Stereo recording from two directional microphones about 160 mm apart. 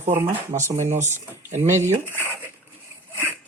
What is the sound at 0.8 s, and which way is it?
Speech, 50° right (ahead or behind).